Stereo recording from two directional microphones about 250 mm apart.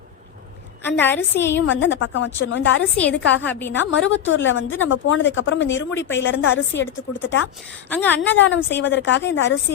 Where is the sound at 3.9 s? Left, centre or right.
Left.